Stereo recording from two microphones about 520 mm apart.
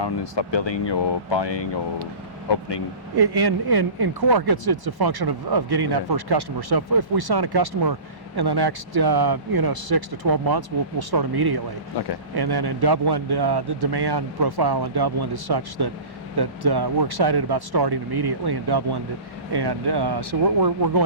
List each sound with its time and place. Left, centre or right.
0.0 s speech: left
3.2 s speech: right
11.9 s speech: left
12.4 s speech: right